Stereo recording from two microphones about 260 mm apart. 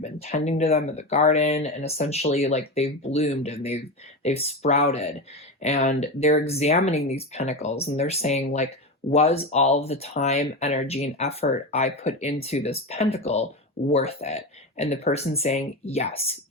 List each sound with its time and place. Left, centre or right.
0.0 s speech: left